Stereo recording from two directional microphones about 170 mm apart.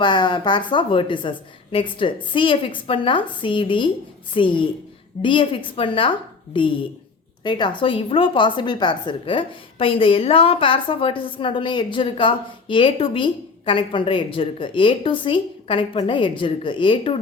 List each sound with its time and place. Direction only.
0.0 s a woman's voice: 25° left (ahead or behind)